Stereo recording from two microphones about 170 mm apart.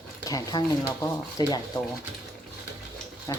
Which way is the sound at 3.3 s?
20° left (ahead or behind).